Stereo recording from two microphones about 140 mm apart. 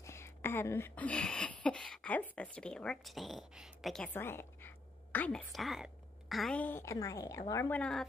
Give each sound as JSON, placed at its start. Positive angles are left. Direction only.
{"t": 0.0, "sound": "speech", "side_deg": 20}
{"t": 4.1, "sound": "a sound", "side_deg": 15}
{"t": 5.5, "sound": "a woman's voice", "side_deg": 0}
{"t": 6.6, "sound": "a woman's voice", "side_deg": 15}
{"t": 7.7, "sound": "speech", "side_deg": 5}